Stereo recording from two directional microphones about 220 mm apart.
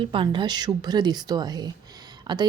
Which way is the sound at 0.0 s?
20° right (ahead or behind).